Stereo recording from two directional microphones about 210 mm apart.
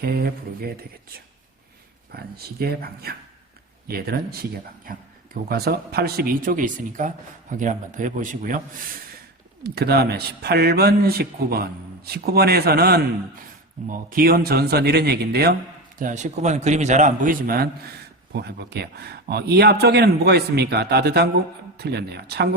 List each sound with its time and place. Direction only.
0.0 s speech: 45° right (ahead or behind)
2.1 s a man's voice: 45° right (ahead or behind)
9.6 s speech: 50° right (ahead or behind)
16.0 s a man's voice: 35° right (ahead or behind)